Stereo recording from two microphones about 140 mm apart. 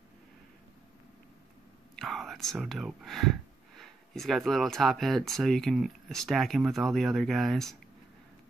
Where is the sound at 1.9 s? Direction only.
Centre (ahead or behind).